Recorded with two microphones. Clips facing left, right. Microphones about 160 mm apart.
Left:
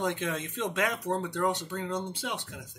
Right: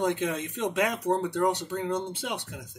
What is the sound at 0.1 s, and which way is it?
Speech, 15° right (ahead or behind).